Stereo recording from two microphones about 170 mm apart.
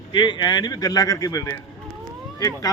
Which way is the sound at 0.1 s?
25° left (ahead or behind).